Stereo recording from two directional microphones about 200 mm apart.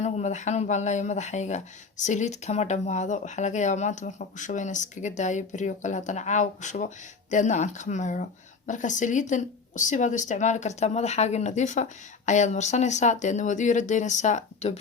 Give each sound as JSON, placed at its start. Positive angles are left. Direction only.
{"t": 0.0, "sound": "speech", "side_deg": 35}